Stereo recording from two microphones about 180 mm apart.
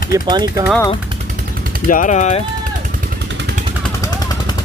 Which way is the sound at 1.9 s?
45° left (ahead or behind).